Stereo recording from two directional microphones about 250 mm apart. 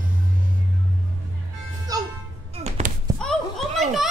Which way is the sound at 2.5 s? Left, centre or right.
Right.